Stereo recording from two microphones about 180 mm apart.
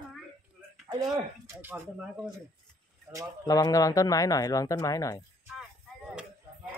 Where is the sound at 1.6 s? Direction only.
10° right (ahead or behind).